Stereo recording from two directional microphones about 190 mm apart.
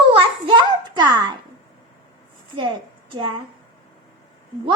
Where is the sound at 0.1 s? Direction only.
25° right (ahead or behind).